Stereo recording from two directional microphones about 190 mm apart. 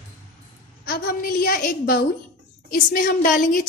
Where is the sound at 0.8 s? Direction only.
55° left (ahead or behind).